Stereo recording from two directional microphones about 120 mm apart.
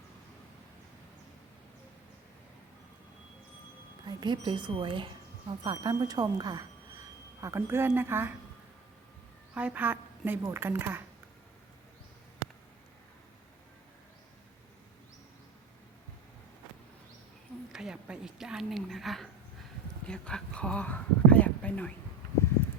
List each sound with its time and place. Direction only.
4.0 s speech: 40° right (ahead or behind)
7.4 s speech: 20° right (ahead or behind)
9.6 s a woman's voice: 10° right (ahead or behind)
17.7 s a woman's voice: 5° right (ahead or behind); by 21.9 s 10° left (ahead or behind)